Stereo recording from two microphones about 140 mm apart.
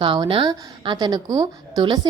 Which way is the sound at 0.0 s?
40° right (ahead or behind).